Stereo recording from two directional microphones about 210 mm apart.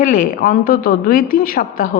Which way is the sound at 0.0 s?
40° left (ahead or behind).